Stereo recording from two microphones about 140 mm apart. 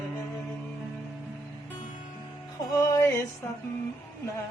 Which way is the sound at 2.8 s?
25° left (ahead or behind).